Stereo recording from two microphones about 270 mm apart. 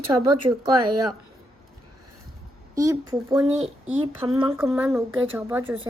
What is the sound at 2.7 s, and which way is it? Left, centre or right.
A woman's voice, centre.